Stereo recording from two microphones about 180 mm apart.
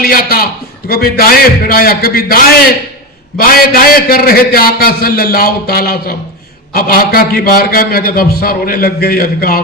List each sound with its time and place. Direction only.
0.0 s a man's voice: 55° left (ahead or behind)